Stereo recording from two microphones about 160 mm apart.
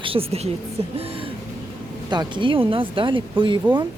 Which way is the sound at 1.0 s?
35° right (ahead or behind).